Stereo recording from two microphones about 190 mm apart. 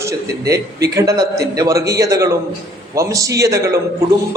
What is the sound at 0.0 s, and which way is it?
A man's voice, 15° right (ahead or behind).